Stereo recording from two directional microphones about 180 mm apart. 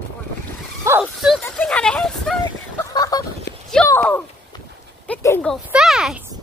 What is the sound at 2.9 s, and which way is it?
Fowl, 20° left (ahead or behind).